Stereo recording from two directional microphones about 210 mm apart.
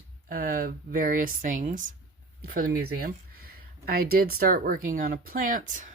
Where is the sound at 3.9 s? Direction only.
45° right (ahead or behind).